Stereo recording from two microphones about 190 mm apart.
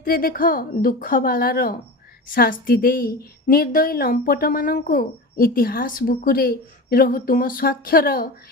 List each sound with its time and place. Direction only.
0.0 s a woman's voice: 50° left (ahead or behind)